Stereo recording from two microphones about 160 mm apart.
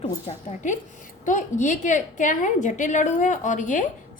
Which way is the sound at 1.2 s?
50° left (ahead or behind).